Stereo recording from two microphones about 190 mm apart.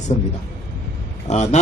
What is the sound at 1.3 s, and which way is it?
Speech, 35° left (ahead or behind).